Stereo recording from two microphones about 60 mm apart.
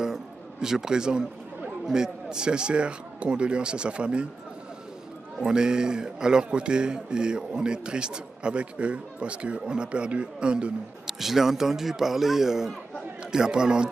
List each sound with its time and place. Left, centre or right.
0.0 s a man's voice: centre
5.4 s speech: centre
11.1 s speech: centre